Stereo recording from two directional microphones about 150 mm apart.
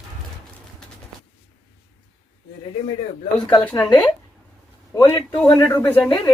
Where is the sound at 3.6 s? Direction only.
10° left (ahead or behind).